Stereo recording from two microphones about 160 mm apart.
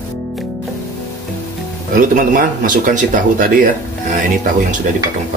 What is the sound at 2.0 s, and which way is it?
Speech, 55° right (ahead or behind).